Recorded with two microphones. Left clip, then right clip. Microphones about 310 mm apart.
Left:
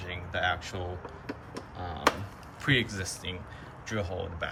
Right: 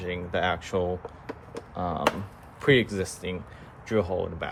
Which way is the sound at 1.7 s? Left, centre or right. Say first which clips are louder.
Right 10 dB; centre.